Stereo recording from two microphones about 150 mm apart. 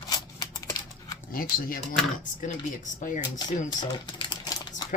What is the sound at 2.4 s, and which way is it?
Speech, 60° left (ahead or behind).